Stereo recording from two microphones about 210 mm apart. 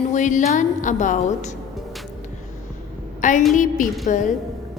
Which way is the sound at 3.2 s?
35° left (ahead or behind).